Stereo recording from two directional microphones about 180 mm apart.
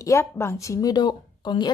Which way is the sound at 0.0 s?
15° left (ahead or behind).